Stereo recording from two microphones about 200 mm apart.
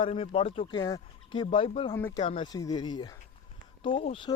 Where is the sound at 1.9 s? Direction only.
15° left (ahead or behind).